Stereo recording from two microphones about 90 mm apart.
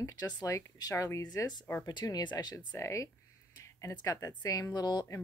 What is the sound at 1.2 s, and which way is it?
A woman's voice, 50° left (ahead or behind).